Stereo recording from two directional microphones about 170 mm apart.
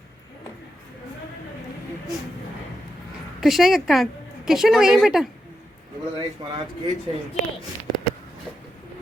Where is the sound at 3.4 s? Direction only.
Centre (ahead or behind).